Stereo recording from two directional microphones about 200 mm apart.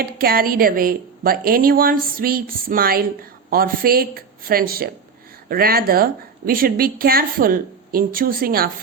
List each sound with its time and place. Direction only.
0.0 s a woman's voice: 50° right (ahead or behind)